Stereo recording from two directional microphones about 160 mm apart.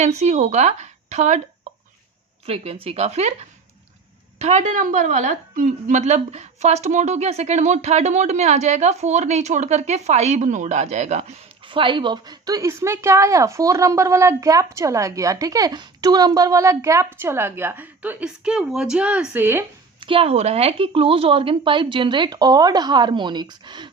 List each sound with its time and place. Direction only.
0.0 s speech: 45° right (ahead or behind)
2.5 s a woman's voice: 35° right (ahead or behind)
4.4 s a woman's voice: 45° right (ahead or behind); by 19.6 s 15° right (ahead or behind)
20.0 s a woman's voice: 35° right (ahead or behind)